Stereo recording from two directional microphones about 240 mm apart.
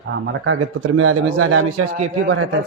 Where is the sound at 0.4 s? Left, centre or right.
Right.